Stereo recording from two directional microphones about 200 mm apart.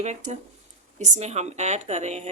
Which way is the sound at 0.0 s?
35° right (ahead or behind).